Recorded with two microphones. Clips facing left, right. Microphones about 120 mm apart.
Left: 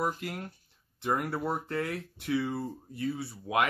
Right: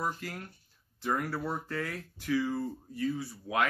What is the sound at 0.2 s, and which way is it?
Speech, 20° left (ahead or behind).